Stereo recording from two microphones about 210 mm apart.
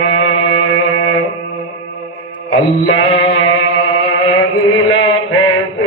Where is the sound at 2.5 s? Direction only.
70° left (ahead or behind).